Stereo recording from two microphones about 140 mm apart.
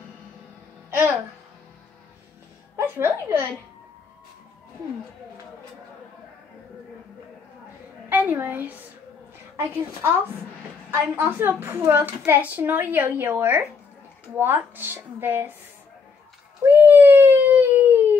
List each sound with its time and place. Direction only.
0.8 s music: 15° right (ahead or behind)
2.7 s a woman's voice: 20° right (ahead or behind)
8.1 s a woman's voice: 15° right (ahead or behind)
10.9 s a woman's voice: 15° right (ahead or behind)
16.6 s a sound: 15° right (ahead or behind)